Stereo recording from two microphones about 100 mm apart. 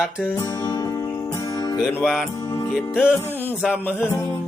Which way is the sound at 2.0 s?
Centre (ahead or behind).